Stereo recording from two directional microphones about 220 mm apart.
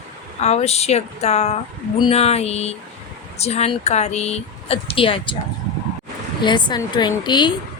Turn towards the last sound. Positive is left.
turn(degrees=20)  # may be behind; listen again after turning